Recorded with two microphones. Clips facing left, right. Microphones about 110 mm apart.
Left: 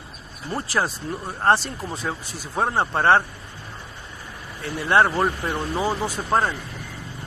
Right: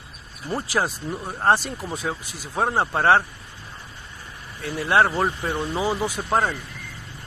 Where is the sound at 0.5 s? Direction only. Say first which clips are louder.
Even; 10° right (ahead or behind).